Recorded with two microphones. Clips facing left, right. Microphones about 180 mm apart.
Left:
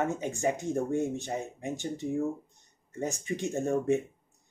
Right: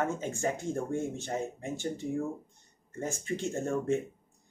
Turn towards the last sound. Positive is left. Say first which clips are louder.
# left 3 dB
turn(degrees=15)  # may be behind; listen again after turning